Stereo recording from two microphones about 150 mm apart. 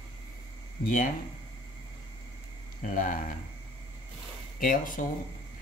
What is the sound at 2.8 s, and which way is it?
Speech, 70° left (ahead or behind).